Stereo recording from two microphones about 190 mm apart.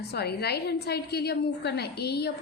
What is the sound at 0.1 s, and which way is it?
A woman's voice, 55° left (ahead or behind).